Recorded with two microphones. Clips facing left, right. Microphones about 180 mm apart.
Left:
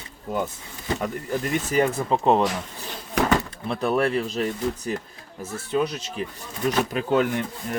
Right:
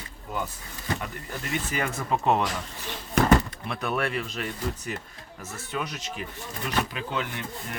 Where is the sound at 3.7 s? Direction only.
30° left (ahead or behind).